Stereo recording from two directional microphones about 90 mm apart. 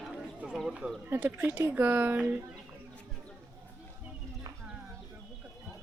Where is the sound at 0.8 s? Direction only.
20° right (ahead or behind).